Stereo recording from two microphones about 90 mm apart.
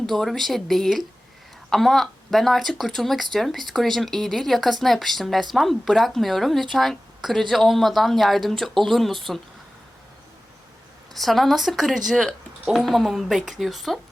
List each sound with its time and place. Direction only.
0.0 s speech: 5° left (ahead or behind)
11.1 s speech: centre (ahead or behind)